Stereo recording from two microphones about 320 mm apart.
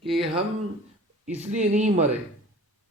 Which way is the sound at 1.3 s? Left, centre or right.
Right.